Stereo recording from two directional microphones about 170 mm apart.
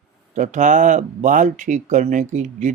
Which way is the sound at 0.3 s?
45° right (ahead or behind).